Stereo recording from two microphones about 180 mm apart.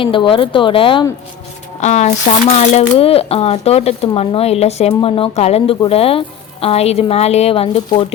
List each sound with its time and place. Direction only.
0.0 s speech: 30° left (ahead or behind)
1.8 s speech: 40° left (ahead or behind)